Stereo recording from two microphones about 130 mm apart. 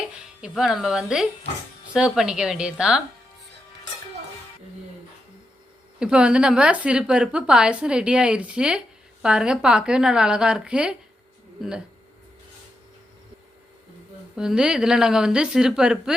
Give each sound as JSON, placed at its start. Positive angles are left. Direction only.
{"t": 0.4, "sound": "a woman's voice", "side_deg": -5}
{"t": 6.0, "sound": "a woman's voice", "side_deg": -5}
{"t": 14.3, "sound": "a woman's voice", "side_deg": -5}